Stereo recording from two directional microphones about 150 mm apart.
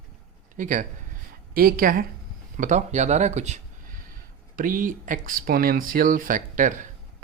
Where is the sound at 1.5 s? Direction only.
75° right (ahead or behind).